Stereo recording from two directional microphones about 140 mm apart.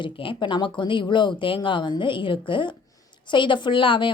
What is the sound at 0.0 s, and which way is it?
A woman's voice, 35° left (ahead or behind).